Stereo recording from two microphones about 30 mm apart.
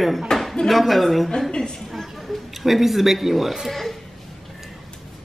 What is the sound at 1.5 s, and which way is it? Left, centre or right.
Speech, left.